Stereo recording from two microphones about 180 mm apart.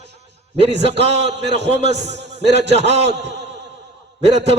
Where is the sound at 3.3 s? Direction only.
70° right (ahead or behind).